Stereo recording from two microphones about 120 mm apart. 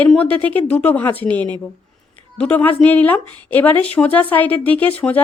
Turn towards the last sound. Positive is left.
turn(degrees=15)  # may be behind; listen again after turning